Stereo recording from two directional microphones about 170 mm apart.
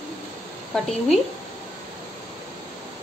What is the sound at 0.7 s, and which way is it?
Speech, centre (ahead or behind).